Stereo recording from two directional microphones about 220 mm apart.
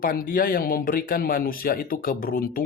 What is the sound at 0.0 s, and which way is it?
Speech, 40° left (ahead or behind).